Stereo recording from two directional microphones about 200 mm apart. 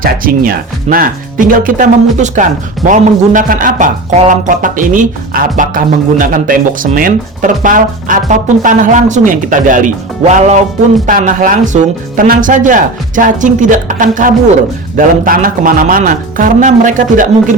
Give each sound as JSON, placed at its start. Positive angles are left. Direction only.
{"t": 0.0, "sound": "speech", "side_deg": -45}